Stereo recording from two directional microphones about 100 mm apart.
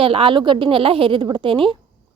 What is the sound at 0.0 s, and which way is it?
A woman's voice, 65° right (ahead or behind).